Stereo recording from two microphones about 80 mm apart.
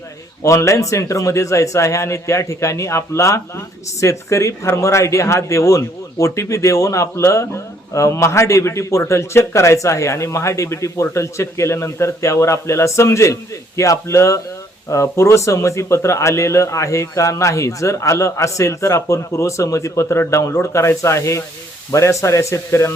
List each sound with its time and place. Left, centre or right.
0.4 s speech: left